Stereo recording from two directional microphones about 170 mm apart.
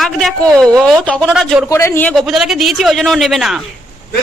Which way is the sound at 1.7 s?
15° left (ahead or behind).